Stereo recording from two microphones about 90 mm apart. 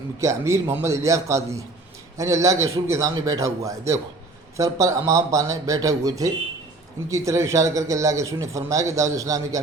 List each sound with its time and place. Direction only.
0.2 s speech: 35° right (ahead or behind)